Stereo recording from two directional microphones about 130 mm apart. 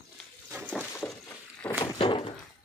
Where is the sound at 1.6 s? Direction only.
15° left (ahead or behind).